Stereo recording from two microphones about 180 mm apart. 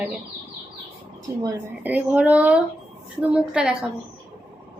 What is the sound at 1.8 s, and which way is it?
A woman's voice, 10° right (ahead or behind).